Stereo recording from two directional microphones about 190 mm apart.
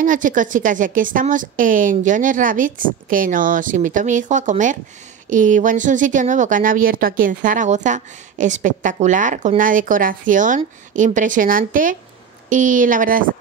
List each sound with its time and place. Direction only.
0.0 s a woman's voice: 45° right (ahead or behind)